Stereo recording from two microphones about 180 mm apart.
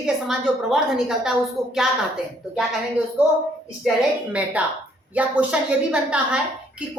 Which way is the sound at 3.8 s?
5° right (ahead or behind).